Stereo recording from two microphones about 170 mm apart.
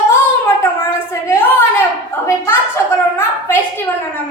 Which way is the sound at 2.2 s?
15° left (ahead or behind).